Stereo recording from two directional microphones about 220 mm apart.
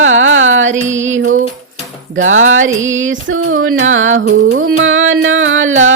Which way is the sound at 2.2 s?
65° right (ahead or behind).